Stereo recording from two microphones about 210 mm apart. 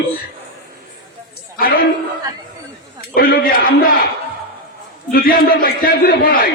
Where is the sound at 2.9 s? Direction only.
45° left (ahead or behind).